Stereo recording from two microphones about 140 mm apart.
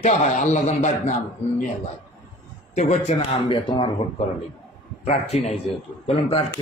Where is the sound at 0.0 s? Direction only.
60° left (ahead or behind).